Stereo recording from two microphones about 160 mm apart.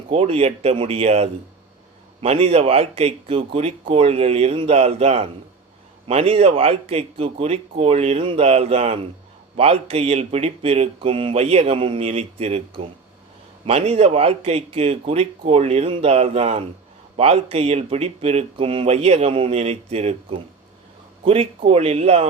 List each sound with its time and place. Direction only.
0.1 s speech: 40° right (ahead or behind)
21.7 s speech: 40° right (ahead or behind)